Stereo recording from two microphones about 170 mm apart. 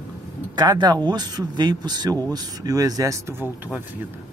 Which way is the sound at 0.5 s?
25° right (ahead or behind).